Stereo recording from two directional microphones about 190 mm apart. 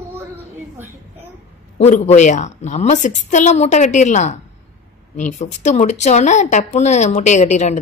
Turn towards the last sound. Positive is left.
turn(degrees=35)  # may be behind; listen again after turning